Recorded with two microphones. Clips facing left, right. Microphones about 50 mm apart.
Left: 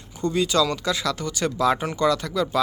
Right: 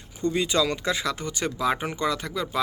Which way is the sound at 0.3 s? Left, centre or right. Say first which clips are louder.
Left 4 dB; right.